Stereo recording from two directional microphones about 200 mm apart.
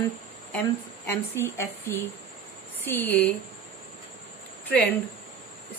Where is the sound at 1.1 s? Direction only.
10° left (ahead or behind).